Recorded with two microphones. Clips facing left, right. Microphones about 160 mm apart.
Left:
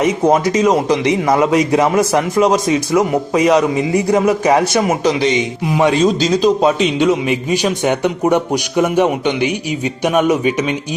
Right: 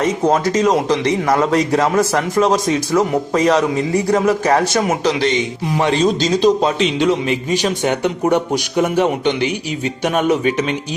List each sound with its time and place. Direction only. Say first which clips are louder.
0.0 s a man's voice: left 2 dB; 15° left (ahead or behind)